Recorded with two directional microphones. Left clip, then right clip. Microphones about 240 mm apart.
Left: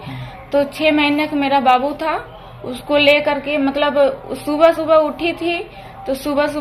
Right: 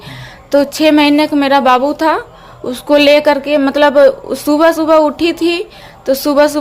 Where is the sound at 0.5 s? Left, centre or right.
Right.